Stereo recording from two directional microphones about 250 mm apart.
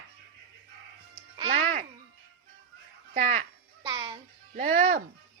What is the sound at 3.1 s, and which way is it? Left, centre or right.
Speech, right.